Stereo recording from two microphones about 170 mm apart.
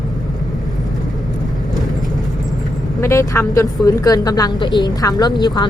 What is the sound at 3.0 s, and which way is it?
Speech, 20° left (ahead or behind).